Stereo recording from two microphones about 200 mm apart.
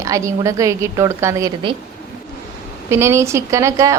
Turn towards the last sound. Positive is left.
turn(degrees=-15)  # may be behind; listen again after turning